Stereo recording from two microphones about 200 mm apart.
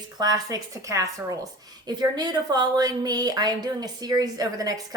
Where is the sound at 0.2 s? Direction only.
20° right (ahead or behind).